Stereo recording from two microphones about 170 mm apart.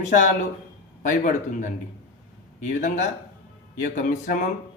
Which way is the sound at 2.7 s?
45° left (ahead or behind).